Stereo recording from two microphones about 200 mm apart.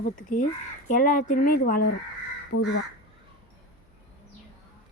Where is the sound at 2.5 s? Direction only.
65° left (ahead or behind).